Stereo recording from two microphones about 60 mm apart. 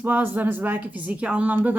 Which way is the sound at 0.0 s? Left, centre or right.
Right.